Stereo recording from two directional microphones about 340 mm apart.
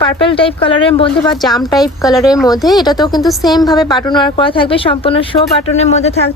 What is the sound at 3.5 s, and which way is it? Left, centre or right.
A woman's voice, centre.